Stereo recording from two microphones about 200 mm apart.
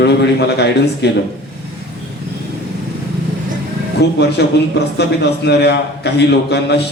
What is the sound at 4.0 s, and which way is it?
A man's voice, 55° left (ahead or behind).